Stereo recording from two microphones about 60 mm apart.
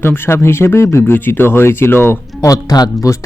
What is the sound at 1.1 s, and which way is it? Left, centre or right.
Speech, left.